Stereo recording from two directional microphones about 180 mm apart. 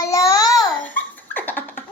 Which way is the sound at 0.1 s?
20° left (ahead or behind).